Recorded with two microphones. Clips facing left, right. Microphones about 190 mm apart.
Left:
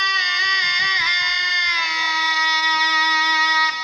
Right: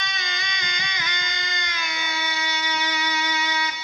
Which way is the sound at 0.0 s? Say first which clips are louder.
Left 2 dB; 50° right (ahead or behind).